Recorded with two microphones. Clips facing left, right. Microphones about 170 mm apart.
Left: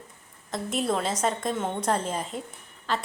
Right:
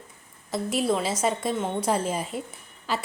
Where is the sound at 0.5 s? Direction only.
Centre (ahead or behind).